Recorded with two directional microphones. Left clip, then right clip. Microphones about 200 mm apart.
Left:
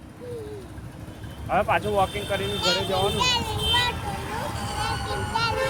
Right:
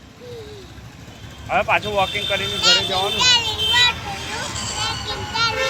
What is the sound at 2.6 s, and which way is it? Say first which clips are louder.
Speech: right 8 dB; 10° left (ahead or behind).